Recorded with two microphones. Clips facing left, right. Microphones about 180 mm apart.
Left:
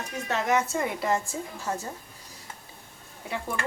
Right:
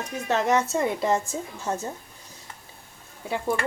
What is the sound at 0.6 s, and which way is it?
Speech, 25° right (ahead or behind).